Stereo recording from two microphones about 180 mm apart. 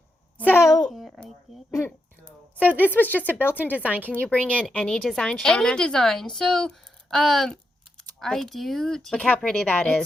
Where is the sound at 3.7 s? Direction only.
10° right (ahead or behind).